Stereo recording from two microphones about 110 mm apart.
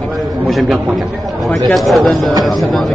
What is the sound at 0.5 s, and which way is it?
A man's voice, centre (ahead or behind).